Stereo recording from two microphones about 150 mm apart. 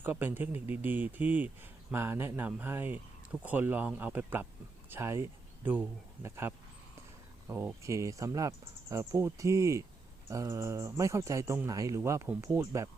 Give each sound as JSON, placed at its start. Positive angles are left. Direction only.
{"t": 0.0, "sound": "speech", "side_deg": -15}